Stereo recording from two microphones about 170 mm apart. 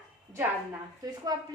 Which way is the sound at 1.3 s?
25° right (ahead or behind).